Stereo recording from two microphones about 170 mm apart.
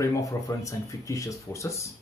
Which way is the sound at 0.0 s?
20° left (ahead or behind).